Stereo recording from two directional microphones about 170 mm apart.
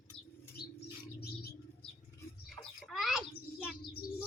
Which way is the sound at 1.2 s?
65° left (ahead or behind).